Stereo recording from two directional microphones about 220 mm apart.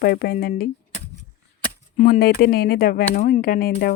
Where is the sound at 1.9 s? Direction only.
40° left (ahead or behind).